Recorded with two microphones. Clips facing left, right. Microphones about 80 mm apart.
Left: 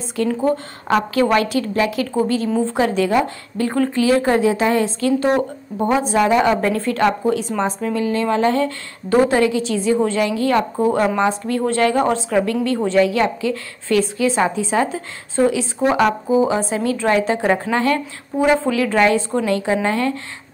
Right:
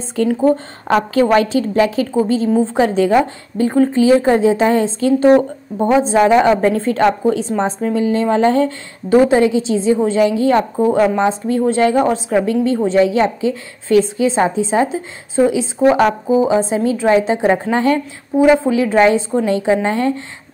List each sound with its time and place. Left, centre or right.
0.8 s a woman's voice: right
18.4 s a woman's voice: centre